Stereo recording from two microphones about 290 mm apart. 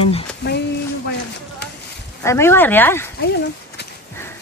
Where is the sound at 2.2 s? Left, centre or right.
Centre.